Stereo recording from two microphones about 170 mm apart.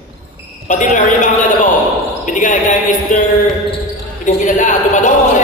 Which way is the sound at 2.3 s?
50° left (ahead or behind).